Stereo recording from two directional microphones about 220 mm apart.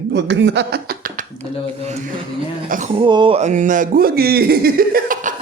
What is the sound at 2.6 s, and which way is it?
Speech, 35° right (ahead or behind).